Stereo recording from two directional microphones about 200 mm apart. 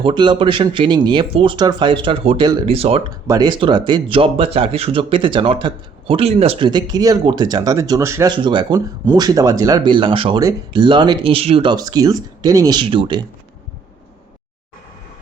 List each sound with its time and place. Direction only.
0.0 s speech: 25° right (ahead or behind)